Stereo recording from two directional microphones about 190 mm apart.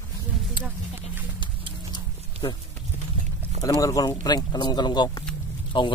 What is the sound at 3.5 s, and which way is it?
Speech, 20° left (ahead or behind).